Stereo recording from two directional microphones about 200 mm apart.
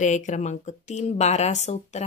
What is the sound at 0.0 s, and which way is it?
Speech, 35° left (ahead or behind).